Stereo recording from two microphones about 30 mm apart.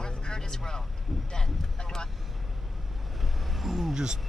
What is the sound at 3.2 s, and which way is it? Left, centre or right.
Vehicle, centre.